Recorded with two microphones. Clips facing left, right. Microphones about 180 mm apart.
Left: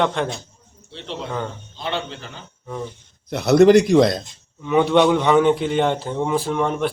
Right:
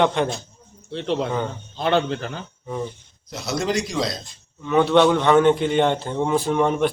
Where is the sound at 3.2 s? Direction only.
60° left (ahead or behind).